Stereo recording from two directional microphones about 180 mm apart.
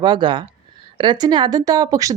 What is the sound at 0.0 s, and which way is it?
Speech, 25° right (ahead or behind).